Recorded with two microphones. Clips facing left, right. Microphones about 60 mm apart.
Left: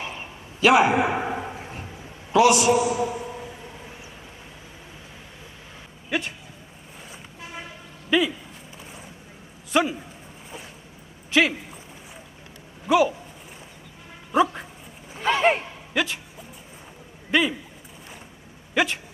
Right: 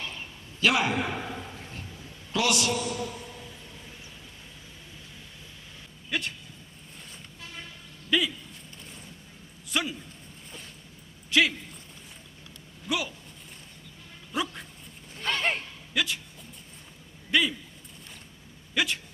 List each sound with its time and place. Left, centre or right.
0.0 s a sound: left
2.3 s a man's voice: centre
3.3 s a sound: left
6.1 s speech: centre
7.4 s vehicle: left
8.1 s speech: centre
12.9 s a man's voice: centre
14.3 s speech: left
15.1 s a sound: centre
15.6 s a sound: left
17.3 s speech: left
18.7 s speech: centre